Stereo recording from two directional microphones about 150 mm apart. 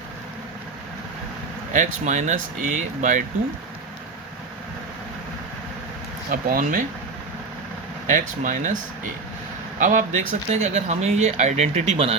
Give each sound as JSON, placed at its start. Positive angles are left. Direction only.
{"t": 1.7, "sound": "speech", "side_deg": -55}
{"t": 6.3, "sound": "speech", "side_deg": -70}
{"t": 8.0, "sound": "speech", "side_deg": -60}
{"t": 9.7, "sound": "speech", "side_deg": -60}